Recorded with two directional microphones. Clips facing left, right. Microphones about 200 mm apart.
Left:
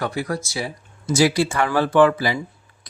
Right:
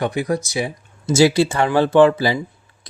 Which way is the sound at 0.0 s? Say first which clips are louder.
Right 4 dB; 20° right (ahead or behind).